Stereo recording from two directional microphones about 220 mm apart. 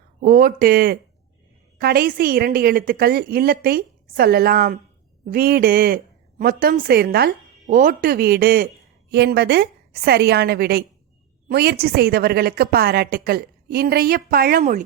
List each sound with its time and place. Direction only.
0.2 s a woman's voice: 40° right (ahead or behind)